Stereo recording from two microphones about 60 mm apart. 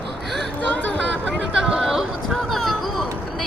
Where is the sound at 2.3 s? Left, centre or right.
Centre.